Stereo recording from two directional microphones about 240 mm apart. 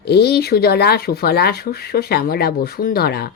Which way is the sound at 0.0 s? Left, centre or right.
Left.